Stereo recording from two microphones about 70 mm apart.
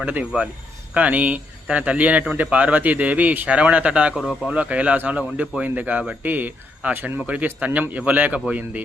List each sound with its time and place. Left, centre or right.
0.0 s a man's voice: right
4.1 s speech: centre
4.5 s a man's voice: centre
7.2 s a man's voice: centre